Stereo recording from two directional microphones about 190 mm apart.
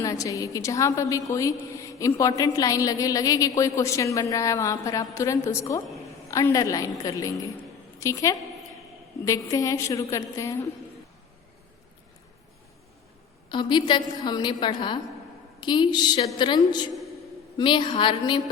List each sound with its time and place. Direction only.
0.0 s a woman's voice: 15° left (ahead or behind)
13.5 s a woman's voice: 25° left (ahead or behind)